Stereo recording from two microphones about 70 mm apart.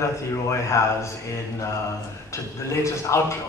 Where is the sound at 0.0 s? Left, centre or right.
Left.